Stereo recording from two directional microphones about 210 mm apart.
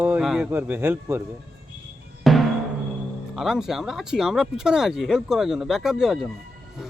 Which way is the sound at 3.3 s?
Centre (ahead or behind).